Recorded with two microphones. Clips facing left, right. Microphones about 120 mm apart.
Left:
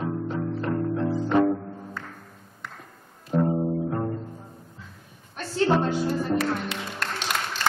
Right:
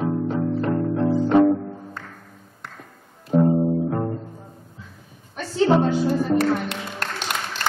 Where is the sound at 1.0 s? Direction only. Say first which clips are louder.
Right 6 dB; 20° right (ahead or behind).